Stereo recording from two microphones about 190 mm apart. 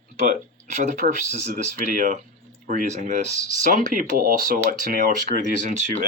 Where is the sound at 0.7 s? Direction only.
40° right (ahead or behind).